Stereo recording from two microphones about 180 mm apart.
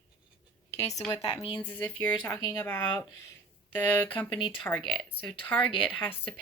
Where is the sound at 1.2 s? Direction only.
30° left (ahead or behind).